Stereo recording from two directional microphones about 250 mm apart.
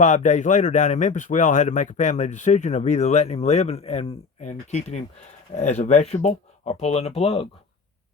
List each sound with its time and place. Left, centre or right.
0.0 s speech: left